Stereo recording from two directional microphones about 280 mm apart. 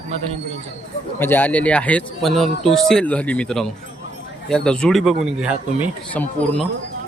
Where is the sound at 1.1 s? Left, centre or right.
Centre.